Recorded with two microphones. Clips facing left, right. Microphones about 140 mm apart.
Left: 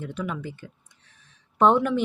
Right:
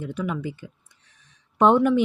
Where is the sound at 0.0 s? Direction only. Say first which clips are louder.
Right 3 dB; 10° right (ahead or behind).